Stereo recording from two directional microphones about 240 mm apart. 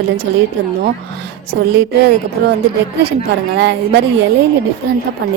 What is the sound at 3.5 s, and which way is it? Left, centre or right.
Speech, right.